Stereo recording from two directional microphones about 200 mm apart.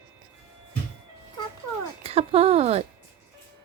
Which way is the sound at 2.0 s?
30° right (ahead or behind).